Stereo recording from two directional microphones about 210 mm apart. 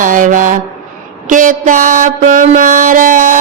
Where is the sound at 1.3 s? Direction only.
40° right (ahead or behind).